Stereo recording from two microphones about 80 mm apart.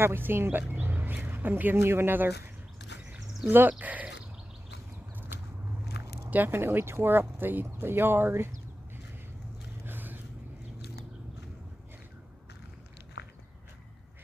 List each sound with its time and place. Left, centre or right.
0.0 s speech: right
3.4 s speech: right
6.3 s speech: right
9.8 s vehicle: right